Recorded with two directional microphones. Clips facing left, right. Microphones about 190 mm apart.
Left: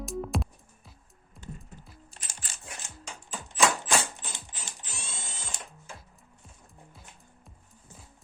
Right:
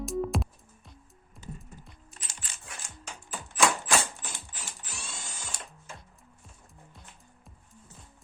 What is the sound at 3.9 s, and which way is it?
Mechanisms, 20° left (ahead or behind).